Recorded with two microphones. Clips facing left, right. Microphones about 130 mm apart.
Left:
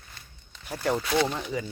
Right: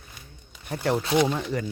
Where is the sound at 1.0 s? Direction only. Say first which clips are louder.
Right 4 dB; 20° right (ahead or behind).